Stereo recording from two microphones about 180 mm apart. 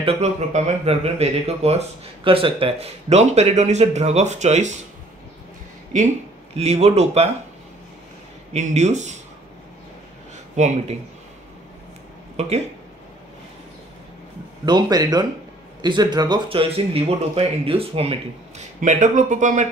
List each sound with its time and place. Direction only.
0.0 s speech: 35° right (ahead or behind)
6.5 s speech: 35° right (ahead or behind)
8.5 s speech: 40° right (ahead or behind)
10.5 s speech: 40° right (ahead or behind)
12.4 s speech: 35° right (ahead or behind)
14.6 s speech: 25° right (ahead or behind)
18.8 s speech: 45° right (ahead or behind)